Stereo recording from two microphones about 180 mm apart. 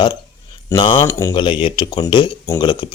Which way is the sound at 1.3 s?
30° left (ahead or behind).